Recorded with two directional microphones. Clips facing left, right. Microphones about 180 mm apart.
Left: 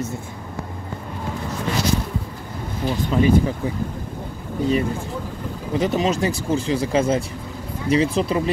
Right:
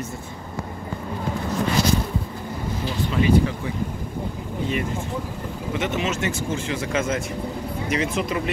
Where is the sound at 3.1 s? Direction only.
35° left (ahead or behind).